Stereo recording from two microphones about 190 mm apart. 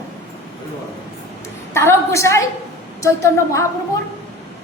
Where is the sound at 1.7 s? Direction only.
15° left (ahead or behind).